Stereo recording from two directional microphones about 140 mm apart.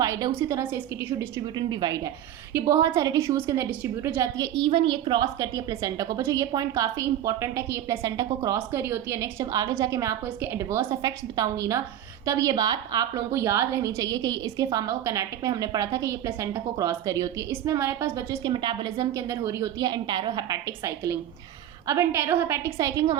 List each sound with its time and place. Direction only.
0.0 s a sound: 25° right (ahead or behind)
0.3 s a woman's voice: 20° right (ahead or behind)
1.4 s a woman's voice: 30° right (ahead or behind)
2.5 s a woman's voice: 20° right (ahead or behind)
4.5 s a woman's voice: 40° right (ahead or behind)
5.2 s a woman's voice: 25° right (ahead or behind)
18.5 s a woman's voice: 35° right (ahead or behind)